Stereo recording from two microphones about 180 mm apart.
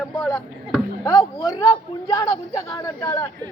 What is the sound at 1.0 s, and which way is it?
A man's voice, 20° left (ahead or behind).